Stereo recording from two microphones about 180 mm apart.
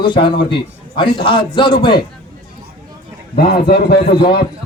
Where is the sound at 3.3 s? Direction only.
60° left (ahead or behind).